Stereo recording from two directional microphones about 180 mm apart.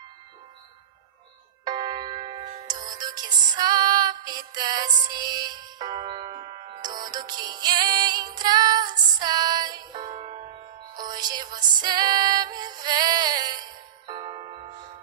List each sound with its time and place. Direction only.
1.6 s music: 25° right (ahead or behind)